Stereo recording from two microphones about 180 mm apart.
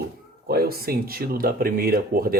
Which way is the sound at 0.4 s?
55° right (ahead or behind).